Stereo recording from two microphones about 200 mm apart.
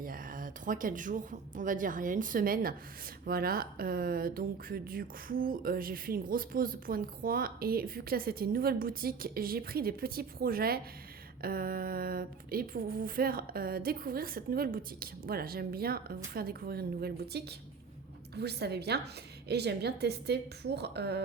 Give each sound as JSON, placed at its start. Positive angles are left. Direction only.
{"t": 0.0, "sound": "a woman's voice", "side_deg": -45}